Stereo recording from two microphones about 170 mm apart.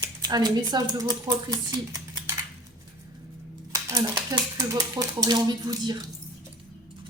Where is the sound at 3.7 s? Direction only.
20° right (ahead or behind).